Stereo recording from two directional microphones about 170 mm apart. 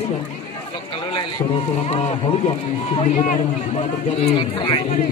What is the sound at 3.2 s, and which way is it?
Speech, 45° left (ahead or behind).